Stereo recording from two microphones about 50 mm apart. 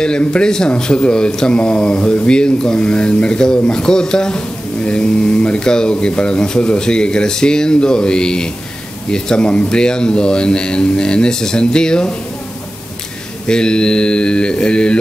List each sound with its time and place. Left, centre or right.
0.0 s speech: centre
13.5 s speech: centre